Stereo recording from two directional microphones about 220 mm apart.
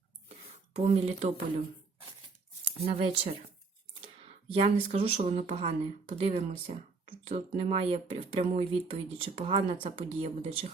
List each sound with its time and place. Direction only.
0.7 s speech: 30° right (ahead or behind)
2.8 s speech: 25° right (ahead or behind)
4.6 s speech: 25° right (ahead or behind)